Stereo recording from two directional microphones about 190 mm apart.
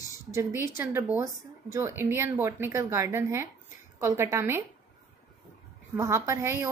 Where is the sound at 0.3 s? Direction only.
15° right (ahead or behind).